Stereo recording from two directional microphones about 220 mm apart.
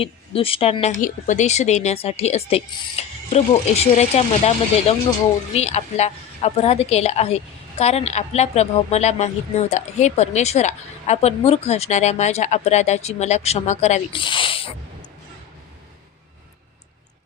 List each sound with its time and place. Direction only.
0.0 s speech: 25° left (ahead or behind)